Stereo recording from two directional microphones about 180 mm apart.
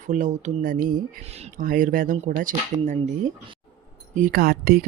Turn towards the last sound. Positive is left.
turn(degrees=-60)  # may be behind; listen again after turning